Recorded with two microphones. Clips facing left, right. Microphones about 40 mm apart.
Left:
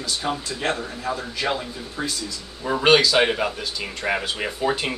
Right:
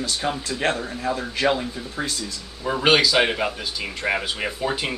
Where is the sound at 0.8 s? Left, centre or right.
Right.